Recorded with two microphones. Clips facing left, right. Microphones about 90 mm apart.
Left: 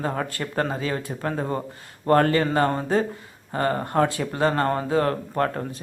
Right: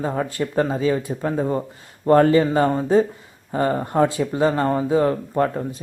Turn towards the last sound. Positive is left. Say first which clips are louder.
# right 3 dB
turn(degrees=-15)  # may be behind; listen again after turning